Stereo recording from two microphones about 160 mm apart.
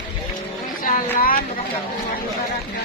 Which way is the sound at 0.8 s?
65° left (ahead or behind).